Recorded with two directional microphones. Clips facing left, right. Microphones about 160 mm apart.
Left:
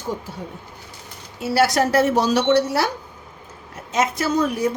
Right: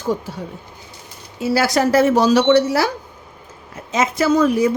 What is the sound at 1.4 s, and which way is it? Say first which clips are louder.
A woman's voice: right 1 dB; 90° right.